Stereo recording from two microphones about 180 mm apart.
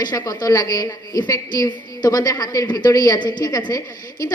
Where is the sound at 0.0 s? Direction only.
20° left (ahead or behind).